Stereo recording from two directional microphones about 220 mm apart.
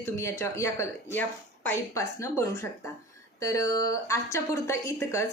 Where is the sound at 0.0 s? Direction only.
10° left (ahead or behind).